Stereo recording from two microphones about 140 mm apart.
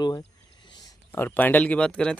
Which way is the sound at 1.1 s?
15° left (ahead or behind).